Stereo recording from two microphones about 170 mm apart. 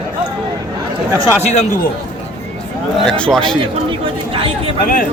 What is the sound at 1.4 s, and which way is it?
Speech, 40° left (ahead or behind).